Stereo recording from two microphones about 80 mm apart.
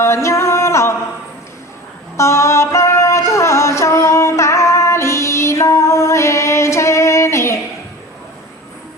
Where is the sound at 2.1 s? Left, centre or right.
Left.